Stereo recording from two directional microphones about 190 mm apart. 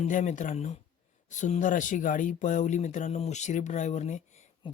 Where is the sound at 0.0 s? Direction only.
40° left (ahead or behind).